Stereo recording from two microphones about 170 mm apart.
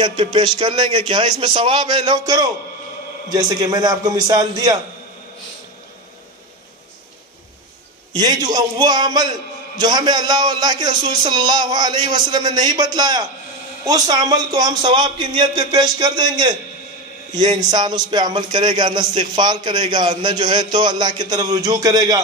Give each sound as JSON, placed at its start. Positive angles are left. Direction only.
{"t": 0.0, "sound": "a man's voice", "side_deg": -25}
{"t": 8.1, "sound": "a man's voice", "side_deg": -25}